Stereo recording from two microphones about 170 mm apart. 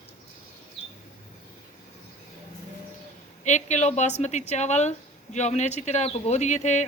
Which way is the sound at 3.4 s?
45° left (ahead or behind).